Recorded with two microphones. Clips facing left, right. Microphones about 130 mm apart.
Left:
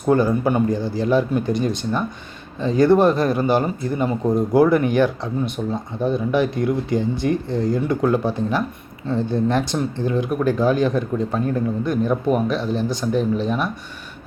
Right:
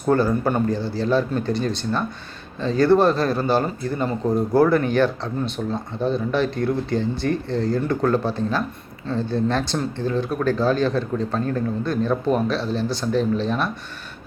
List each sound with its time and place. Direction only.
0.1 s speech: 15° left (ahead or behind)